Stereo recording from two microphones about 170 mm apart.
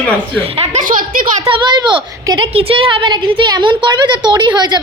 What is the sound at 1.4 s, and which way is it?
Speech, 25° right (ahead or behind).